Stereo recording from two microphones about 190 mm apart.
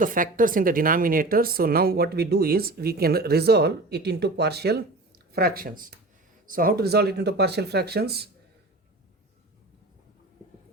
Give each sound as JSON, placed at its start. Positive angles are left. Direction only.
{"t": 0.0, "sound": "a woman's voice", "side_deg": -45}